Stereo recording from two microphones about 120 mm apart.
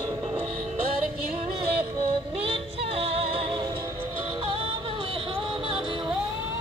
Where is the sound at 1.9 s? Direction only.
50° right (ahead or behind).